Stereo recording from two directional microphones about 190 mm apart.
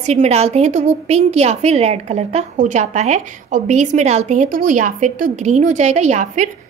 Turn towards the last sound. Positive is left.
turn(degrees=-40)  # may be behind; listen again after turning